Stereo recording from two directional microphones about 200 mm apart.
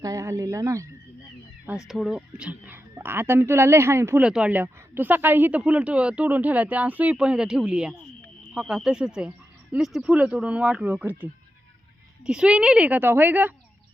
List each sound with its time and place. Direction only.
0.0 s speech: 15° right (ahead or behind)
1.9 s speech: centre (ahead or behind)